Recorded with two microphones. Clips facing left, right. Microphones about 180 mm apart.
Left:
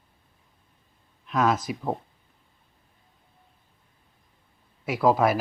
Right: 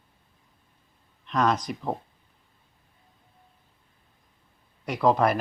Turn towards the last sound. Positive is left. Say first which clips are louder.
# left 1 dB
turn(degrees=5)  # may be behind; listen again after turning